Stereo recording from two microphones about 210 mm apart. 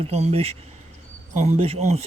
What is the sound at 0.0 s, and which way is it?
Speech, 30° right (ahead or behind).